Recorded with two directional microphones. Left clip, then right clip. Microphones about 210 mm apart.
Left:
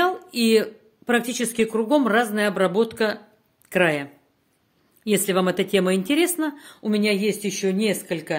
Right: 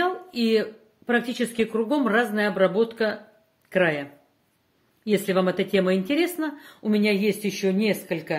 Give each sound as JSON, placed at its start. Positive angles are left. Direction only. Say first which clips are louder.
{"t": 0.0, "sound": "a woman's voice", "louder": "left 3 dB", "side_deg": 30}